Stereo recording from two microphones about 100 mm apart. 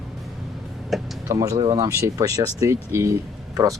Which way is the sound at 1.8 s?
35° right (ahead or behind).